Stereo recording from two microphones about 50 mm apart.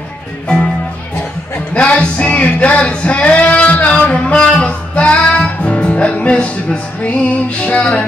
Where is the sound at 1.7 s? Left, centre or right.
Left.